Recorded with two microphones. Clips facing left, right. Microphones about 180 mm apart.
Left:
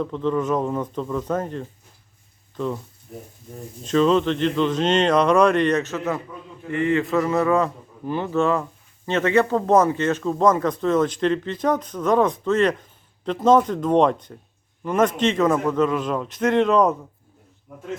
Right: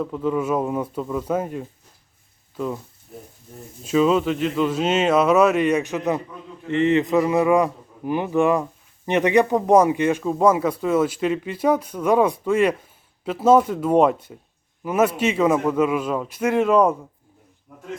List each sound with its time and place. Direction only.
0.0 s speech: 10° right (ahead or behind)
3.8 s speech: 5° right (ahead or behind)